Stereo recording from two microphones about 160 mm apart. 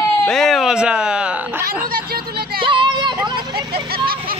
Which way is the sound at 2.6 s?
30° right (ahead or behind).